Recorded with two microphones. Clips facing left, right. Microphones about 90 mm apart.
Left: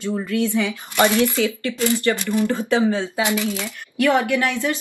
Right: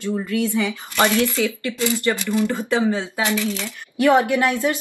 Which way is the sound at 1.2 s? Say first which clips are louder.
Left 1 dB; 20° left (ahead or behind).